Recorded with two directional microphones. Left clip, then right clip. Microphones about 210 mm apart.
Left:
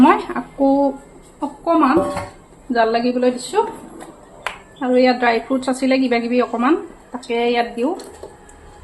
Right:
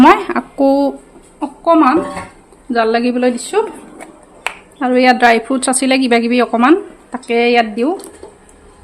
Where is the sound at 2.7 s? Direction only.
30° right (ahead or behind).